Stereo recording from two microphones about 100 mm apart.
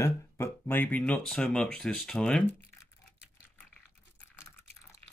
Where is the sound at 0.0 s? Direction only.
25° left (ahead or behind); by 2.4 s 5° left (ahead or behind).